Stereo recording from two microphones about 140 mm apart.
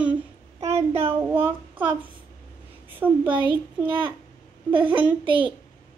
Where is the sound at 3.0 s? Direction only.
15° right (ahead or behind).